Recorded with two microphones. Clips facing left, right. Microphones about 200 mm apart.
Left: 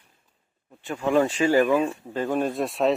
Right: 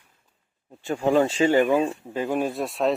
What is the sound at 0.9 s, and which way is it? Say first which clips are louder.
Speech: right 1 dB; 30° right (ahead or behind).